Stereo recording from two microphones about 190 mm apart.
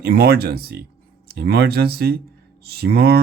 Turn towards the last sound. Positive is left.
turn(degrees=-55)  # may be behind; listen again after turning